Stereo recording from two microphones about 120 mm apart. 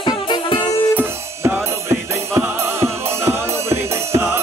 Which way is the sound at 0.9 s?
20° right (ahead or behind).